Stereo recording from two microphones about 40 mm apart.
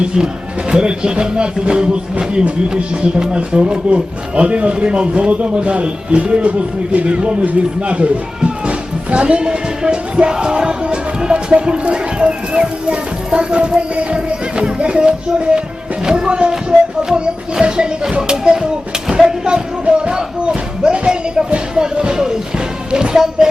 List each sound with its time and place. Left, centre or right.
0.0 s speech: centre
10.3 s music: centre
11.5 s speech: right
19.8 s a sound: right